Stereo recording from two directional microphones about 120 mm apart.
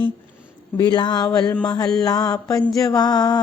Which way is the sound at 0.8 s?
35° left (ahead or behind).